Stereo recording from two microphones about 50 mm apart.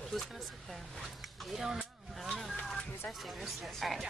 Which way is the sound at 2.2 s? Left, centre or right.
Centre.